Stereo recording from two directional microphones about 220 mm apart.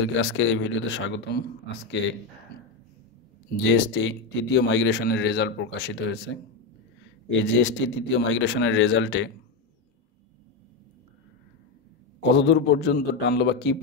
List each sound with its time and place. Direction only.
0.0 s a man's voice: 60° left (ahead or behind)
3.6 s a man's voice: 50° left (ahead or behind)
12.2 s speech: 50° left (ahead or behind)